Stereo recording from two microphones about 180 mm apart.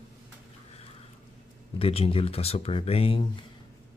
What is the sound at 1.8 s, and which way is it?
Speech, 30° left (ahead or behind).